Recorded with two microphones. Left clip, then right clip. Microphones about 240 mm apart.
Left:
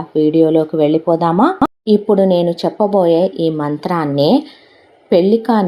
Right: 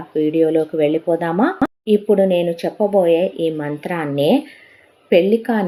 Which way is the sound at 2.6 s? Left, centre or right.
Centre.